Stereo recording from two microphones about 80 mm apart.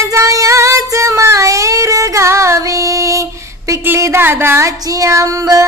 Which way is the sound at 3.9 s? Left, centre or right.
Right.